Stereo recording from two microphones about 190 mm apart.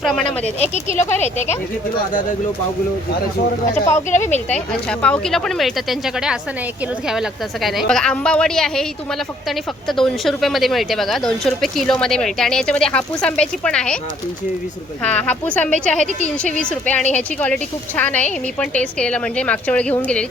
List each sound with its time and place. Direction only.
0.0 s speech: centre (ahead or behind)
0.3 s speech: 35° left (ahead or behind)
4.1 s speech: 40° left (ahead or behind)
4.4 s speech: 5° left (ahead or behind)
9.9 s speech: centre (ahead or behind)
15.0 s speech: 5° left (ahead or behind)